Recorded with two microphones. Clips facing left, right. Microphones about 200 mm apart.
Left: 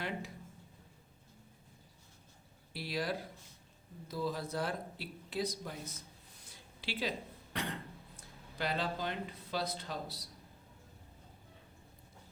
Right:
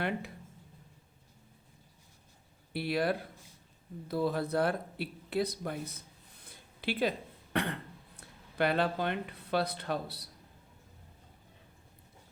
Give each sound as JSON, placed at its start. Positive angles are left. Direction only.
{"t": 2.7, "sound": "speech", "side_deg": -60}
{"t": 6.4, "sound": "throat clearing", "side_deg": -55}
{"t": 8.5, "sound": "speech", "side_deg": -60}